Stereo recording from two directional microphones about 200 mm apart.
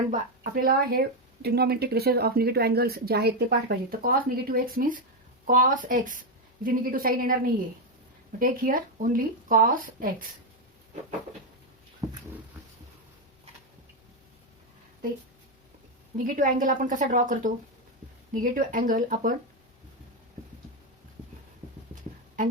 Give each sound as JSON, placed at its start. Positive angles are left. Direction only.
{"t": 0.1, "sound": "speech", "side_deg": -45}
{"t": 8.4, "sound": "speech", "side_deg": -45}
{"t": 12.0, "sound": "a sound", "side_deg": -15}
{"t": 16.1, "sound": "speech", "side_deg": -45}